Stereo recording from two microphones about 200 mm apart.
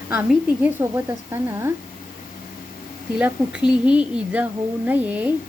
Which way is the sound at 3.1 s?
5° right (ahead or behind).